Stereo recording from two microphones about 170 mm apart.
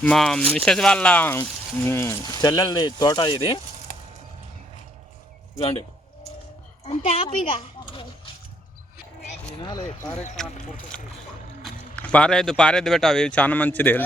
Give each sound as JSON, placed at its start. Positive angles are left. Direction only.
{"t": 0.0, "sound": "speech", "side_deg": 5}
{"t": 6.8, "sound": "a child's voice", "side_deg": 35}
{"t": 9.2, "sound": "a sound", "side_deg": 45}
{"t": 9.6, "sound": "speech", "side_deg": 25}
{"t": 10.4, "sound": "speech", "side_deg": 5}